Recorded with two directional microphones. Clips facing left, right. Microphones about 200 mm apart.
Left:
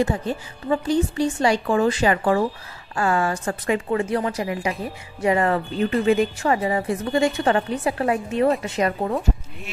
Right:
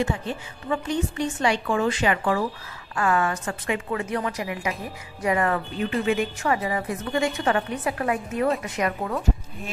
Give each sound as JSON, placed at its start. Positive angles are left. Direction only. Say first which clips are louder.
{"t": 0.0, "sound": "a woman's voice", "louder": "left 4 dB", "side_deg": 40}